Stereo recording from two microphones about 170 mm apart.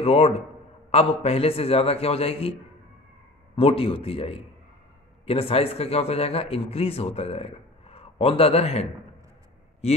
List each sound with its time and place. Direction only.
0.0 s speech: 35° left (ahead or behind)
3.5 s speech: 35° left (ahead or behind)